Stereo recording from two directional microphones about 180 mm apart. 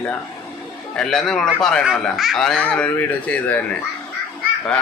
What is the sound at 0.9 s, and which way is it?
Speech, centre (ahead or behind).